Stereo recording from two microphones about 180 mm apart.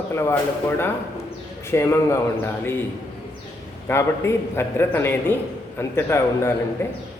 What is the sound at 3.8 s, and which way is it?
A man's voice, 15° left (ahead or behind).